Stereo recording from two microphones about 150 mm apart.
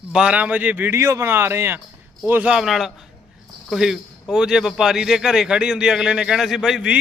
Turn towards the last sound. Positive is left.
turn(degrees=-5)  # may be behind; listen again after turning